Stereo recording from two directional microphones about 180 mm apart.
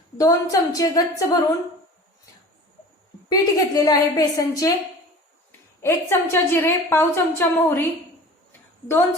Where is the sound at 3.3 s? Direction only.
20° left (ahead or behind).